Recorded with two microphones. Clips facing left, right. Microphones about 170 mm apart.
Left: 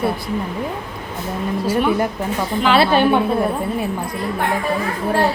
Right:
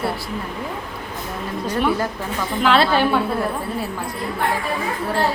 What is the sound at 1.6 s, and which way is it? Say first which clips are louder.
Speech: left 2 dB; centre (ahead or behind).